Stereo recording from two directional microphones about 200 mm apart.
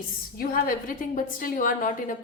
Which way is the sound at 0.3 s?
45° left (ahead or behind).